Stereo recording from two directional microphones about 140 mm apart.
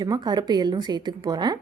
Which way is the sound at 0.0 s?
30° right (ahead or behind).